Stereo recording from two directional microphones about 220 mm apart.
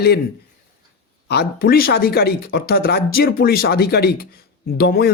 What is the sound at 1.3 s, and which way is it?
Speech, 45° left (ahead or behind).